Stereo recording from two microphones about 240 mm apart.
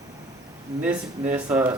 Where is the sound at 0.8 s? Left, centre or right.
Centre.